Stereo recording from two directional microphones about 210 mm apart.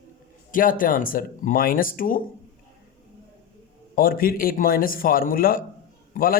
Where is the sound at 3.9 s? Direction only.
45° left (ahead or behind).